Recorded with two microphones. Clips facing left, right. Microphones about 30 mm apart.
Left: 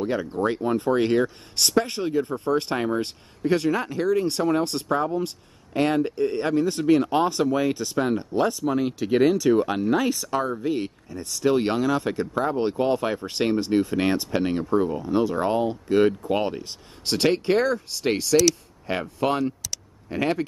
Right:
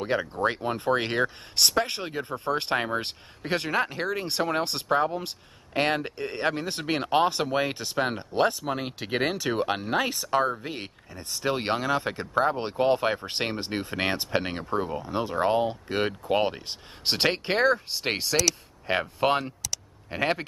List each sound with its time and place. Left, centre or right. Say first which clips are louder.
0.0 s speech: left 2 dB; right
1.6 s speech: left 2 dB; centre
1.9 s speech: left 7 dB; right
2.2 s speech: left 3 dB; centre
2.5 s speech: left 3 dB; right
6.2 s speech: left 4 dB; centre
6.5 s speech: left 9 dB; right